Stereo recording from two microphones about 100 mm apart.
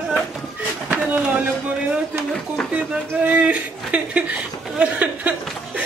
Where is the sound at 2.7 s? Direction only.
15° right (ahead or behind).